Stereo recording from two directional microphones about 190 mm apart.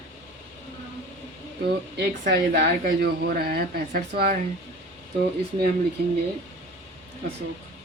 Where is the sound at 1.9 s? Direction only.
60° right (ahead or behind).